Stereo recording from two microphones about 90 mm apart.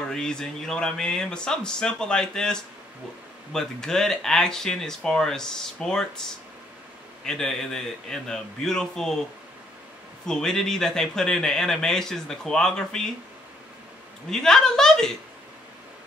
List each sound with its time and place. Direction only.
0.0 s speech: 10° left (ahead or behind)
7.2 s speech: 5° left (ahead or behind)
10.2 s speech: 5° left (ahead or behind)
14.3 s speech: 5° left (ahead or behind)